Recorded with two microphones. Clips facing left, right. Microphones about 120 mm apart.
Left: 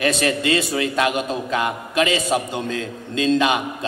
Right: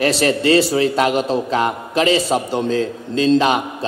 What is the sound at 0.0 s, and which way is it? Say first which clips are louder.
A man's voice: right 4 dB; 30° right (ahead or behind).